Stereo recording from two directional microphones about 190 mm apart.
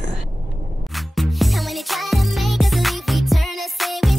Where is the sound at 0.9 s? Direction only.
Centre (ahead or behind).